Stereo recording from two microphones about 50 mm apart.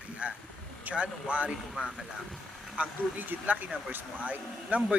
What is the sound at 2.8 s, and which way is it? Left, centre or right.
Speech, right.